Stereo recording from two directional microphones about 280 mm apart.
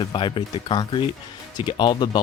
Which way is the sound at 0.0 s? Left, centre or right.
Centre.